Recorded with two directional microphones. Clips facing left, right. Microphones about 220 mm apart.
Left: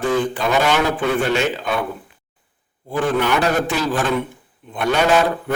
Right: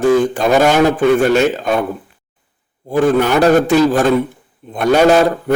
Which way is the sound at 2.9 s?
45° right (ahead or behind).